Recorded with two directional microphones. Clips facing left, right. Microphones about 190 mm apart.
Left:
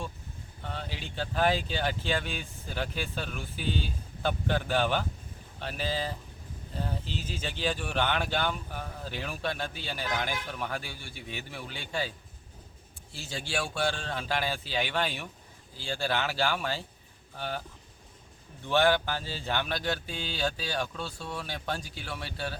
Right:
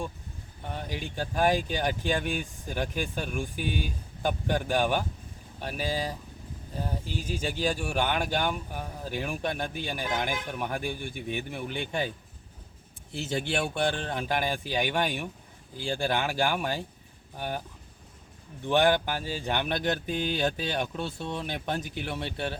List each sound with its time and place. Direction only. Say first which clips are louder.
0.6 s speech: right 3 dB; 15° right (ahead or behind)
13.1 s speech: right 5 dB; 20° right (ahead or behind)
18.6 s speech: right 2 dB; 15° right (ahead or behind)